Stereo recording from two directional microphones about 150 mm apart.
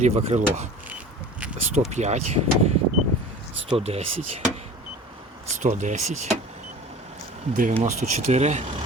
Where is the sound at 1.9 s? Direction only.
50° right (ahead or behind).